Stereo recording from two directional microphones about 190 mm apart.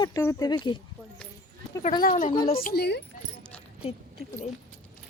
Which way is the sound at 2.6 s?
55° left (ahead or behind).